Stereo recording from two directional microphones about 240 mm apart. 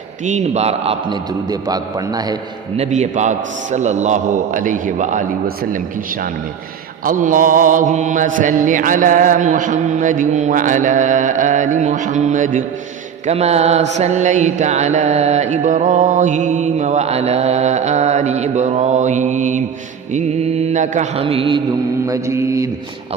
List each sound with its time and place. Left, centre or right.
0.3 s mantra: right
2.7 s mantra: right
7.0 s mantra: right; by 22.6 s centre